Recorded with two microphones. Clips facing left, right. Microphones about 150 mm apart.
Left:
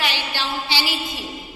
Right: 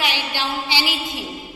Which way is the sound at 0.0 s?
15° right (ahead or behind).